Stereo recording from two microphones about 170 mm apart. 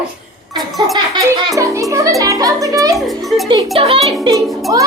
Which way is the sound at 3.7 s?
35° right (ahead or behind).